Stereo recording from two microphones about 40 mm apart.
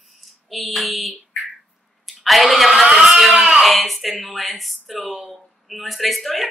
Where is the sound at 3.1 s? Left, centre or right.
Centre.